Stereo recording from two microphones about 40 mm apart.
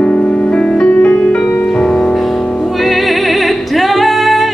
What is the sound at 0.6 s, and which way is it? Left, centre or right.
Music, left.